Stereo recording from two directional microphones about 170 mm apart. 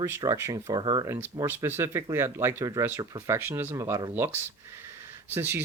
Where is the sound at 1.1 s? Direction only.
15° right (ahead or behind).